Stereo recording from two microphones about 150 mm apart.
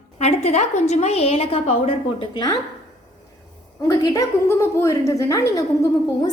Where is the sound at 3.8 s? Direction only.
25° left (ahead or behind).